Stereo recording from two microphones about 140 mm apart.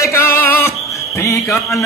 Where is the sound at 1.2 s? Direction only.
20° left (ahead or behind).